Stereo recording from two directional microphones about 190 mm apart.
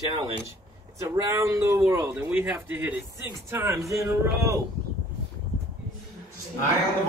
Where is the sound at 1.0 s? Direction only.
15° right (ahead or behind).